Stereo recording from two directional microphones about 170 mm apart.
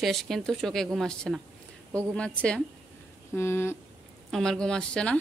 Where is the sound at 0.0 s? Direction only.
Centre (ahead or behind).